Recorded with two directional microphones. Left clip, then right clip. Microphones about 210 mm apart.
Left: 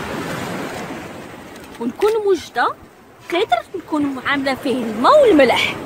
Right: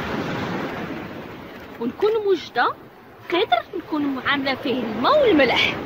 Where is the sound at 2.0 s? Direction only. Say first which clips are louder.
Left 4 dB; 45° left (ahead or behind).